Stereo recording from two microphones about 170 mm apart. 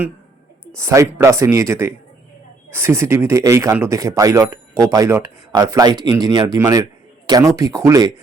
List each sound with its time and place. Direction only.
0.8 s speech: 15° right (ahead or behind)